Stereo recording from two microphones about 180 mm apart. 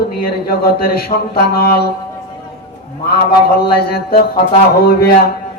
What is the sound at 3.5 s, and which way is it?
Speech, 60° left (ahead or behind).